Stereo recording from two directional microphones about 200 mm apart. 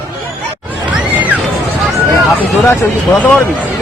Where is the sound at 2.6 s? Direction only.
10° left (ahead or behind).